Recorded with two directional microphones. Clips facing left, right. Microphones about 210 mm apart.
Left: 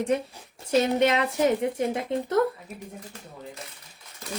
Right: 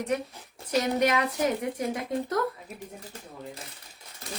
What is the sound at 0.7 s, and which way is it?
Speech, 25° left (ahead or behind).